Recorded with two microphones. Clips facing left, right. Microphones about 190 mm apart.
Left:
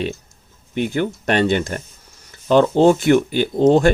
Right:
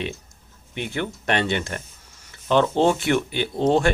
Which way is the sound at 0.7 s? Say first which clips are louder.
Left 7 dB; 40° left (ahead or behind).